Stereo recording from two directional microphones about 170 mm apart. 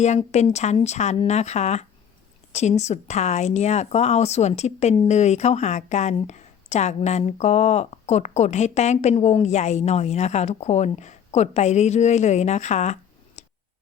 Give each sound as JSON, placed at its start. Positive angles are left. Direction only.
{"t": 0.0, "sound": "speech", "side_deg": 40}